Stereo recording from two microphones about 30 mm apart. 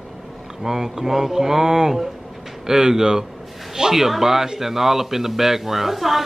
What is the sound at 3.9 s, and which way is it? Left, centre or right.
A man's voice, centre.